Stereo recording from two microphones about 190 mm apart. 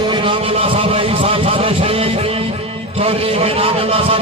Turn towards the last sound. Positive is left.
turn(degrees=-30)  # may be behind; listen again after turning